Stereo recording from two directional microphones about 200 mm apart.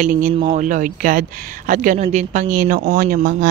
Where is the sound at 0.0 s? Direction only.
40° right (ahead or behind).